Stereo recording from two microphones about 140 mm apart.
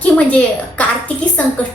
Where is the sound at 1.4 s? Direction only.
10° left (ahead or behind).